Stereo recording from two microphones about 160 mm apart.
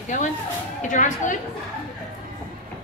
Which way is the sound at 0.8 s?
55° left (ahead or behind).